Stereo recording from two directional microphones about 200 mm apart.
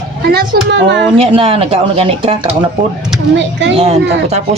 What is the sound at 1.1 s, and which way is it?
A woman's voice, 25° right (ahead or behind).